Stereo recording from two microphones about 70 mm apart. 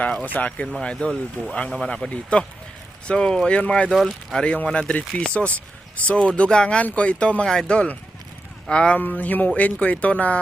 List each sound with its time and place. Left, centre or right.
0.0 s speech: centre
3.9 s speech: centre
9.0 s speech: left